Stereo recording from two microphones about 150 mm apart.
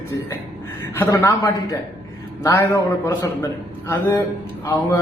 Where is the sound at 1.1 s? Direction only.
25° left (ahead or behind).